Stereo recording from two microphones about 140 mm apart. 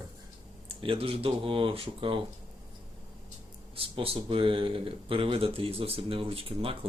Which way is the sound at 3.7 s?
40° right (ahead or behind).